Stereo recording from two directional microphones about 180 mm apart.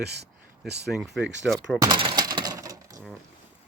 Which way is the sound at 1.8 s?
25° right (ahead or behind).